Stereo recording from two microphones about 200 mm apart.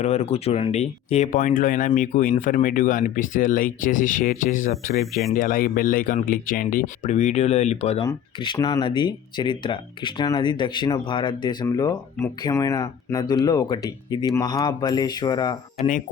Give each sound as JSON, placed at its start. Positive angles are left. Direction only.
{"t": 0.0, "sound": "speech", "side_deg": 35}
{"t": 8.0, "sound": "speech", "side_deg": 20}